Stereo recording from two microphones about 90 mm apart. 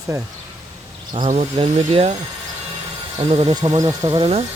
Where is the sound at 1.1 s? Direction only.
75° right (ahead or behind).